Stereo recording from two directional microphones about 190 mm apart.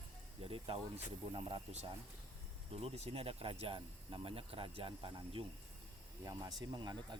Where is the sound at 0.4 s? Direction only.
30° right (ahead or behind).